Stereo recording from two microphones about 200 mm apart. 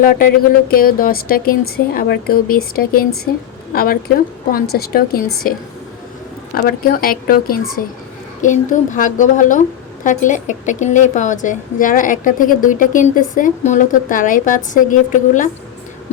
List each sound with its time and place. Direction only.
0.0 s a woman's voice: 45° left (ahead or behind)